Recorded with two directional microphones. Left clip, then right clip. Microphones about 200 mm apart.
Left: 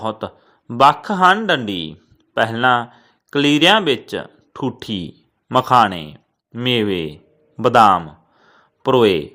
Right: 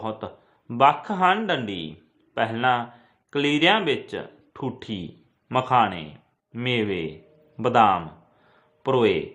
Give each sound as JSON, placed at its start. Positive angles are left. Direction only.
{"t": 0.0, "sound": "a man's voice", "side_deg": 35}